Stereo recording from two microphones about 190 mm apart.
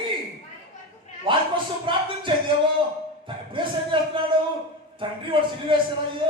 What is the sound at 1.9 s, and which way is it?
Music, 25° right (ahead or behind).